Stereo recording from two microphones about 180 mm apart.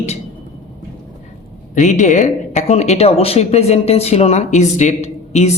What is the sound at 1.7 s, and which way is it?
Speech, 45° left (ahead or behind).